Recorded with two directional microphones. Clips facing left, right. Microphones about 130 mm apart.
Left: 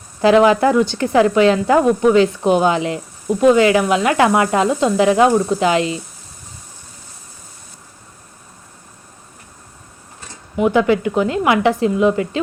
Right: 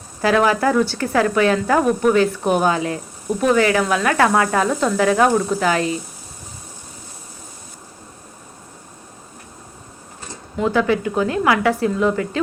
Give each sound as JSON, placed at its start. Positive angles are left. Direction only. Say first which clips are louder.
{"t": 0.2, "sound": "speech", "louder": "left 5 dB", "side_deg": 20}
{"t": 10.6, "sound": "speech", "louder": "left 3 dB", "side_deg": 20}